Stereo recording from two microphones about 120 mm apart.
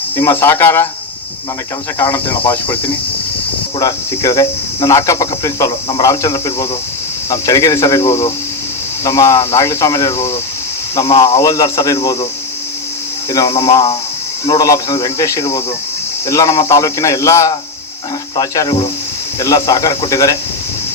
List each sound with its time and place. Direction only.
0.2 s cricket: 20° left (ahead or behind)
2.0 s cricket: 20° left (ahead or behind)
3.8 s cricket: 30° left (ahead or behind)
11.2 s speech: 30° left (ahead or behind)
13.3 s cricket: 30° left (ahead or behind)
18.3 s speech: 30° left (ahead or behind)
19.4 s cricket: 30° left (ahead or behind)